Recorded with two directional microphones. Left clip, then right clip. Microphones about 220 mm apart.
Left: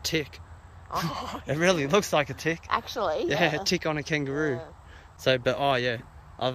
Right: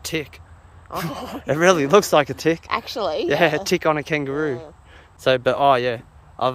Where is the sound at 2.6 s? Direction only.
45° right (ahead or behind).